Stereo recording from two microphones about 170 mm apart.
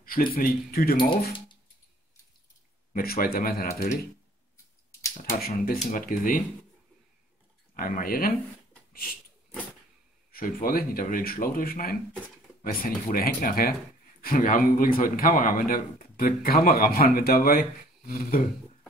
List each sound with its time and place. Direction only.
0.0 s a man's voice: 60° left (ahead or behind)
2.9 s a man's voice: 60° left (ahead or behind)
5.3 s speech: 50° left (ahead or behind)
7.7 s a man's voice: 55° left (ahead or behind)
10.3 s a man's voice: 60° left (ahead or behind)